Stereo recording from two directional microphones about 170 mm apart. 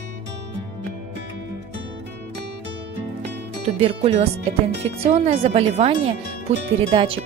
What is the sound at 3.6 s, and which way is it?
Speech, 35° right (ahead or behind).